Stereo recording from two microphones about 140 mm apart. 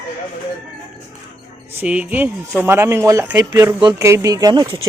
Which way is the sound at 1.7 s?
10° right (ahead or behind).